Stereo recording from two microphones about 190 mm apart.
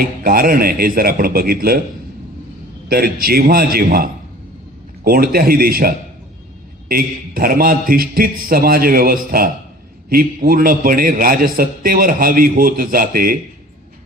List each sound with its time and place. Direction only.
0.0 s a man's voice: 50° right (ahead or behind)
2.9 s a man's voice: 50° right (ahead or behind)